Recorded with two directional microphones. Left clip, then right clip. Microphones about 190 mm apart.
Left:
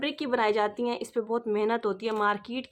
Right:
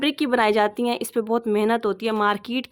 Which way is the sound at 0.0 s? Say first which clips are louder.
Right 7 dB; 50° right (ahead or behind).